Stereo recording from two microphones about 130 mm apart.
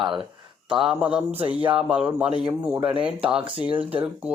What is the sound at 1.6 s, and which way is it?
Speech, 40° right (ahead or behind).